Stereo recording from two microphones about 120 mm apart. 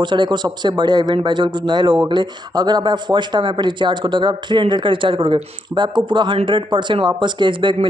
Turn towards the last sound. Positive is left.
turn(degrees=-40)  # may be behind; listen again after turning